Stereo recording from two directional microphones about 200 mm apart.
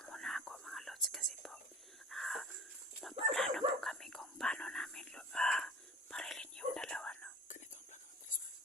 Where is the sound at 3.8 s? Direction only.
Centre (ahead or behind).